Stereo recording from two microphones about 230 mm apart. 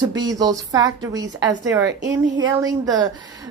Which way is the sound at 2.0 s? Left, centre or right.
Right.